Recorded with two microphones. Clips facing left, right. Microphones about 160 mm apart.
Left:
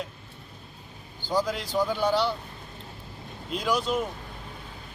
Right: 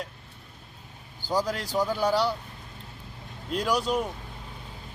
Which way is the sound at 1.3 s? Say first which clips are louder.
Even; 10° right (ahead or behind).